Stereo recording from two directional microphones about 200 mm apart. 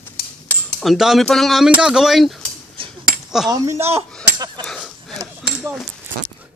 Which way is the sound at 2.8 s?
25° right (ahead or behind).